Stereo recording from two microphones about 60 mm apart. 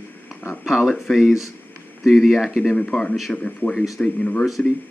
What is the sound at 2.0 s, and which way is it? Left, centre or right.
Speech, centre.